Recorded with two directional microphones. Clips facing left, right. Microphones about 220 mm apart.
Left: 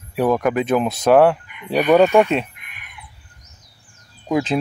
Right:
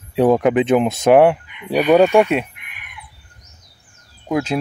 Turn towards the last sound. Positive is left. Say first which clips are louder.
# even
turn(degrees=0)  # may be behind; listen again after turning